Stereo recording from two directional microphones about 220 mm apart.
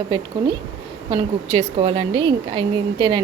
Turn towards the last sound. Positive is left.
turn(degrees=-20)  # may be behind; listen again after turning